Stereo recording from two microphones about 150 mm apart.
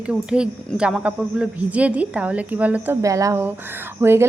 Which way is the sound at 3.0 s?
20° right (ahead or behind).